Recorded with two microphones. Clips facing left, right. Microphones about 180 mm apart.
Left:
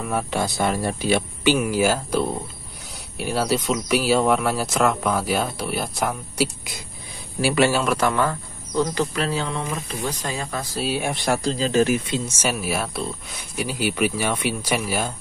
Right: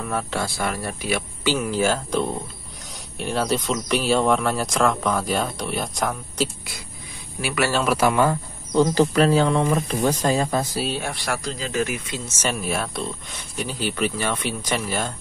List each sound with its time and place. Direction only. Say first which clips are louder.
0.0 s speech: left 2 dB; 10° left (ahead or behind); by 1.2 s 25° left (ahead or behind)
1.4 s speech: left 1 dB; 10° left (ahead or behind)
7.4 s speech: left 5 dB; 25° left (ahead or behind)
7.8 s speech: right 1 dB; 5° right (ahead or behind)
8.1 s speech: right 3 dB; 15° right (ahead or behind)
8.9 s speech: right 7 dB; 40° right (ahead or behind)
11.0 s speech: left 4 dB; 20° left (ahead or behind)
12.3 s speech: left 1 dB; 10° left (ahead or behind)